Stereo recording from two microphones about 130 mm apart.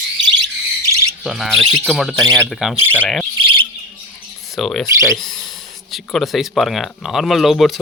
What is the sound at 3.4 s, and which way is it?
Bird, 40° right (ahead or behind).